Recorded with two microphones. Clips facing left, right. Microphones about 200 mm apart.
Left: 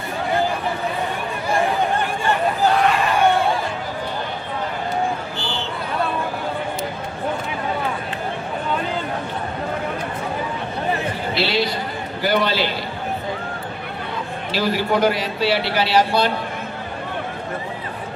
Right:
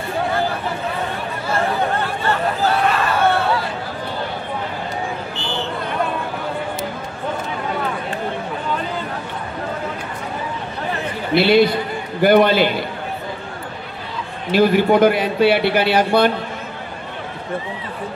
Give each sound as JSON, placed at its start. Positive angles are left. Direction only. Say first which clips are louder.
{"t": 1.5, "sound": "a sound", "louder": "even", "side_deg": 15}
{"t": 11.3, "sound": "a man's voice", "louder": "right 10 dB", "side_deg": -55}
{"t": 14.5, "sound": "a man's voice", "louder": "right 7 dB", "side_deg": -55}